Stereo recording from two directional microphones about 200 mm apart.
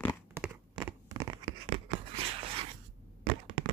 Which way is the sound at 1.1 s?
20° right (ahead or behind).